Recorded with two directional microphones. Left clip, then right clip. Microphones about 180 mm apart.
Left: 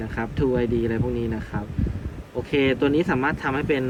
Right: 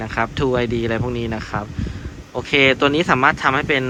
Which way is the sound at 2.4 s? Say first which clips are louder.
Right 7 dB; centre (ahead or behind).